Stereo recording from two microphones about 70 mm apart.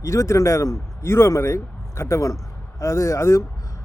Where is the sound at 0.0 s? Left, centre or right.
Left.